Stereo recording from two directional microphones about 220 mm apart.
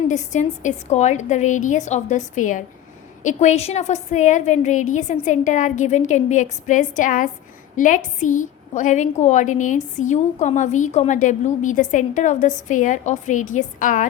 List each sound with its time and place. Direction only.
0.1 s a woman's voice: 35° left (ahead or behind)